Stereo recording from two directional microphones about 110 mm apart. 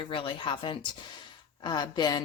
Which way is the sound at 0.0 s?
55° left (ahead or behind).